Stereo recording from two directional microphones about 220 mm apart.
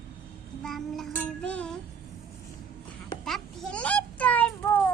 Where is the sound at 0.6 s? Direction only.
Centre (ahead or behind).